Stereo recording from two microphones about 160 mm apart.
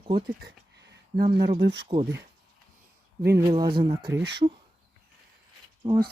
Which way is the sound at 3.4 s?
20° right (ahead or behind).